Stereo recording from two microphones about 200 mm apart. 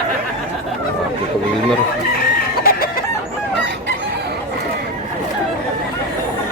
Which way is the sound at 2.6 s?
45° left (ahead or behind).